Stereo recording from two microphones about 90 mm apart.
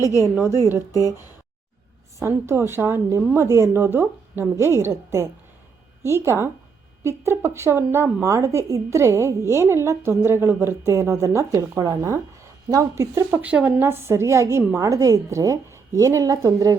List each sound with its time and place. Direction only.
0.0 s a woman's voice: 40° left (ahead or behind)
0.9 s a woman's voice: 35° right (ahead or behind)
13.4 s a woman's voice: 15° right (ahead or behind); by 16.7 s 40° right (ahead or behind)